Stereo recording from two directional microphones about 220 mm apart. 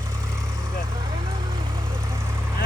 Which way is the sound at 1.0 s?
25° right (ahead or behind).